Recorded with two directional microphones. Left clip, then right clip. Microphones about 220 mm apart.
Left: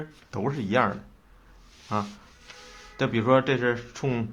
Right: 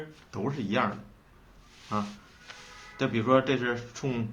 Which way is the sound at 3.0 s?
50° left (ahead or behind).